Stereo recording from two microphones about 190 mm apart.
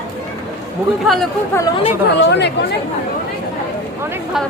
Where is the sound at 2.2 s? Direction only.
65° left (ahead or behind).